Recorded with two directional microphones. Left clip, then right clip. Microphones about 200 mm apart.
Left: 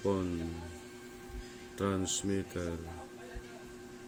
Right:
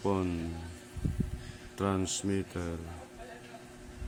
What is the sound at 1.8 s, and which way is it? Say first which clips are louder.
Speech: right 2 dB; 25° right (ahead or behind).